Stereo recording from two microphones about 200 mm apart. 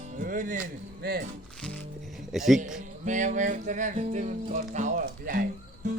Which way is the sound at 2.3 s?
Centre (ahead or behind).